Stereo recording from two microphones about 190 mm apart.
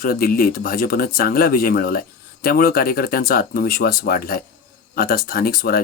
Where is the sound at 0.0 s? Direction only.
50° left (ahead or behind).